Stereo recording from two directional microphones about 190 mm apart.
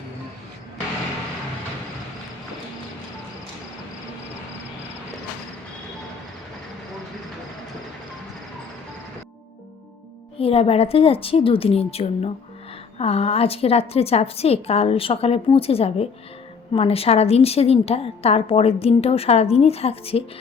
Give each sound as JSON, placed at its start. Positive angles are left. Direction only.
{"t": 10.3, "sound": "a woman's voice", "side_deg": 30}